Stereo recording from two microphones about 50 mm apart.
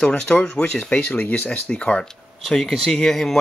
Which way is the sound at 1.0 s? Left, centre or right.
Left.